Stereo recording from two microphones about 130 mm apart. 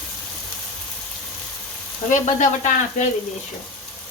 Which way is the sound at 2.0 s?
70° left (ahead or behind).